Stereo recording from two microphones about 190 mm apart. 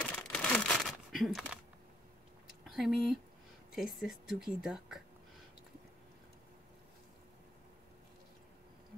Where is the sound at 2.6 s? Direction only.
Centre (ahead or behind).